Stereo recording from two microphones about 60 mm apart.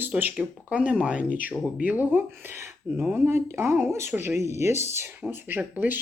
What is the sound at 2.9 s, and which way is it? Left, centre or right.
Speech, right.